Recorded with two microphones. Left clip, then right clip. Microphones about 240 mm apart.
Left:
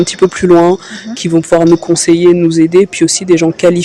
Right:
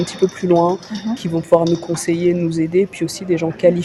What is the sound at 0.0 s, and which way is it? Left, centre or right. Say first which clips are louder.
Speech: left 8 dB; left.